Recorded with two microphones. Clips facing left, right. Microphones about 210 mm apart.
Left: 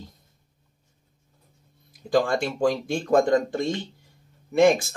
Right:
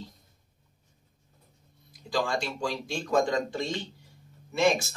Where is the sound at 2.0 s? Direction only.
55° left (ahead or behind).